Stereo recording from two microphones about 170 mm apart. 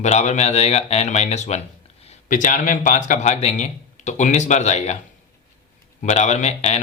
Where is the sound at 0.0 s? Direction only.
40° left (ahead or behind).